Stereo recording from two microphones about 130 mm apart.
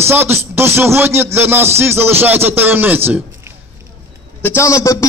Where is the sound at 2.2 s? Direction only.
15° right (ahead or behind).